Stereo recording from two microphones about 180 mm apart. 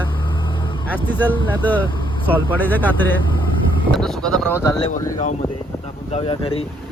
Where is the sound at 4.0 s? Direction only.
5° left (ahead or behind).